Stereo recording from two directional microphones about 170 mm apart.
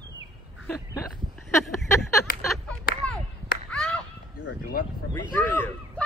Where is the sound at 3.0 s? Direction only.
5° left (ahead or behind).